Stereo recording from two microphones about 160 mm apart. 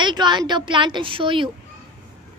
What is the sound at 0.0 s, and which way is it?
Speech, 30° right (ahead or behind).